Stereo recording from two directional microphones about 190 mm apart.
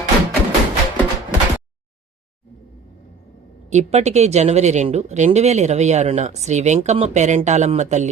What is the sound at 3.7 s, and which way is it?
Speech, 35° right (ahead or behind).